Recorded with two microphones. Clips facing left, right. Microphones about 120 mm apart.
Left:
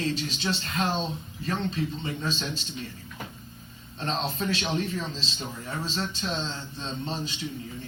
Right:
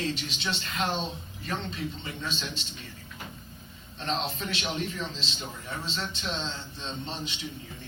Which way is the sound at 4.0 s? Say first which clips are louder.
Left 2 dB; 40° left (ahead or behind).